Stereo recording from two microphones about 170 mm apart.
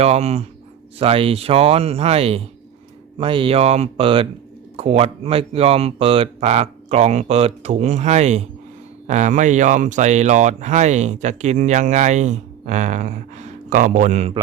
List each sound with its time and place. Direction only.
0.0 s speech: 40° right (ahead or behind)